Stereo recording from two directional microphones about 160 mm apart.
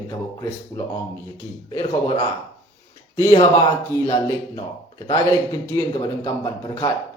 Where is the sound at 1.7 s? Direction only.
25° left (ahead or behind).